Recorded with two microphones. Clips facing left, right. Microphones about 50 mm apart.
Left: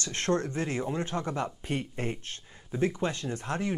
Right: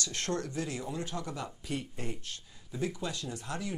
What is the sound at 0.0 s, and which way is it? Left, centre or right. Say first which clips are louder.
Speech: left 6 dB; left.